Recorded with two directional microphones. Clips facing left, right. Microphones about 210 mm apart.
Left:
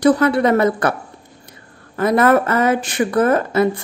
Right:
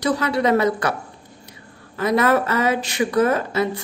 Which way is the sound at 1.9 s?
50° left (ahead or behind).